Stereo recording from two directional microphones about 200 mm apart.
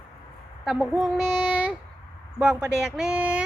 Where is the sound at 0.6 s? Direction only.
Centre (ahead or behind).